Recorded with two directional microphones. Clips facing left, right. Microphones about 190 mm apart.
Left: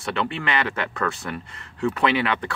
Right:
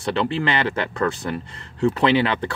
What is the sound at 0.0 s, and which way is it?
Speech, 30° right (ahead or behind).